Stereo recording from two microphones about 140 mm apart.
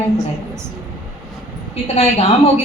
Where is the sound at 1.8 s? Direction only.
45° left (ahead or behind).